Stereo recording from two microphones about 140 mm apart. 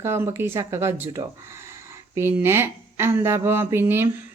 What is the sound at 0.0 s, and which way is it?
Speech, 15° right (ahead or behind).